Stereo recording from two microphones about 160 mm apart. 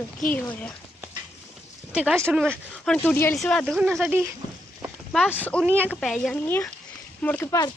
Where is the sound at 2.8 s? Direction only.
10° left (ahead or behind).